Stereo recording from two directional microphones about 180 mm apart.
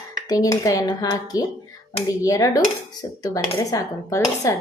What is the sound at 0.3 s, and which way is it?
A woman's voice, 20° left (ahead or behind).